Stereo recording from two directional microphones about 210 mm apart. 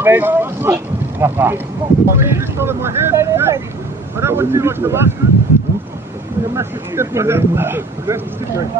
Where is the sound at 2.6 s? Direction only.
10° right (ahead or behind).